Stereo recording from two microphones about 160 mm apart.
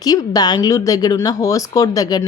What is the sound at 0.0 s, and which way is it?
A woman's voice, 25° left (ahead or behind).